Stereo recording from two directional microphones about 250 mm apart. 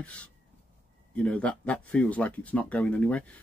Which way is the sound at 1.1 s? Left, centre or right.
Centre.